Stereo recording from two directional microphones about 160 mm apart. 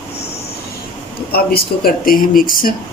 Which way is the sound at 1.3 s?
70° left (ahead or behind).